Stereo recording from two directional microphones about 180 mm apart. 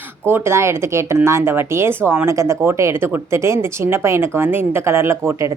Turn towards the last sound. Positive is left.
turn(degrees=-15)  # may be behind; listen again after turning